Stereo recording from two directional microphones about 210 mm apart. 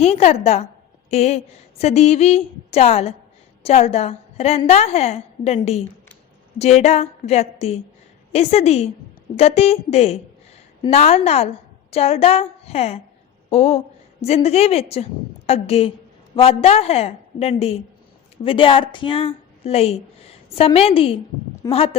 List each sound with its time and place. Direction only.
0.0 s a woman's voice: 30° left (ahead or behind)